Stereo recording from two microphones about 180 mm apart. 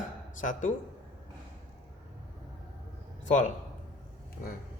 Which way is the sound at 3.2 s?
45° left (ahead or behind).